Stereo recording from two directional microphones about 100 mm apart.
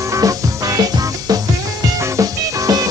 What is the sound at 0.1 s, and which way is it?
Music, 35° right (ahead or behind).